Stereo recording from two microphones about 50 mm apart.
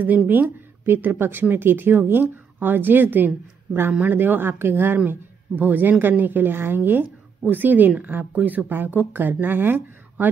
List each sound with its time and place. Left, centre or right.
0.3 s a woman's voice: right
5.6 s speech: right